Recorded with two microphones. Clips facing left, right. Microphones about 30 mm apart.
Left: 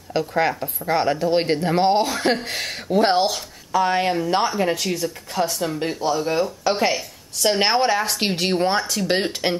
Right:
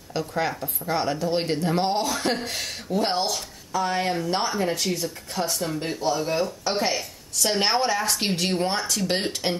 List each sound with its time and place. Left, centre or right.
0.2 s speech: centre
4.1 s speech: centre
4.7 s speech: centre
7.4 s speech: centre